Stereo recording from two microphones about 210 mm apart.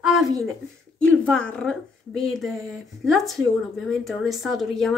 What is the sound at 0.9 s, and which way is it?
A woman's voice, 5° left (ahead or behind).